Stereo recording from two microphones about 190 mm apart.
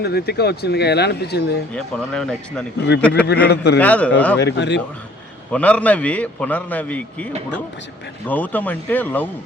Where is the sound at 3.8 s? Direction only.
5° left (ahead or behind).